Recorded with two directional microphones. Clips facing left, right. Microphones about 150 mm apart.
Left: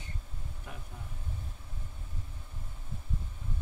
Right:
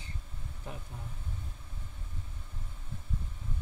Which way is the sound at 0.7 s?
30° right (ahead or behind).